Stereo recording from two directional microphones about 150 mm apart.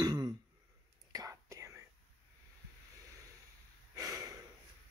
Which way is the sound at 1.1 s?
25° right (ahead or behind).